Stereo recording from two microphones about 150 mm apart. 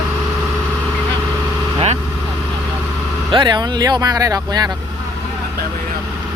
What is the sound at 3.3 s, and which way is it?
Speech, 30° right (ahead or behind).